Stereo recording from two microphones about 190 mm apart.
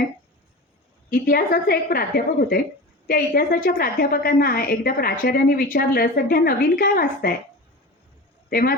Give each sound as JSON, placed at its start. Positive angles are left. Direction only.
{"t": 1.1, "sound": "a woman's voice", "side_deg": 50}
{"t": 8.4, "sound": "a man's voice", "side_deg": 55}